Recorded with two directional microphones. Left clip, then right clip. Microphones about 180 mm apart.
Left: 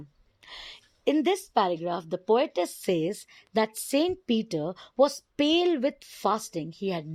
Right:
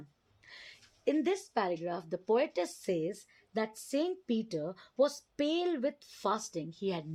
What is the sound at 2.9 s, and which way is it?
Speech, 40° left (ahead or behind).